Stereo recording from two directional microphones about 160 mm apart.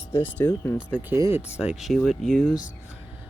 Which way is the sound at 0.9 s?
15° right (ahead or behind).